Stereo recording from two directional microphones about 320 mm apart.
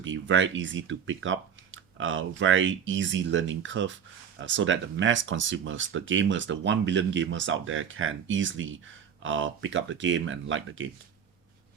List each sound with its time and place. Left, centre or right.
0.0 s speech: right